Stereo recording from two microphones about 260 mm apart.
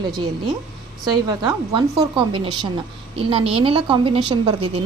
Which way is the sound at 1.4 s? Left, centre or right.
Centre.